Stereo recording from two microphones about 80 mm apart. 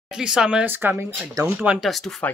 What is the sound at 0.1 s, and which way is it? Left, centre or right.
Speech, centre.